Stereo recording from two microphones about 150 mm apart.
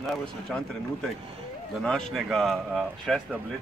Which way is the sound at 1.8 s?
5° left (ahead or behind).